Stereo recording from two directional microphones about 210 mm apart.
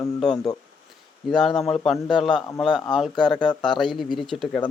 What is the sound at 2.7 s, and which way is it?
Speech, 20° left (ahead or behind).